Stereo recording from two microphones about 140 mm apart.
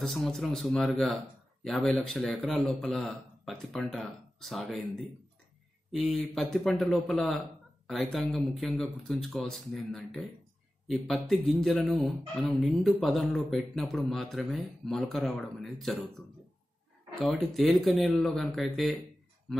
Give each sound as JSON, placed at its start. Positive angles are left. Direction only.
{"t": 0.0, "sound": "speech", "side_deg": 0}
{"t": 17.2, "sound": "speech", "side_deg": 0}